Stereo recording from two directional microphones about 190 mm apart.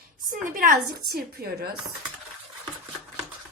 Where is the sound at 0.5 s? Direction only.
45° right (ahead or behind).